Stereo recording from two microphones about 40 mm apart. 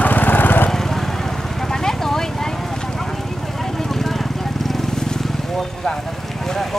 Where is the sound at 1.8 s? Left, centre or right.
Centre.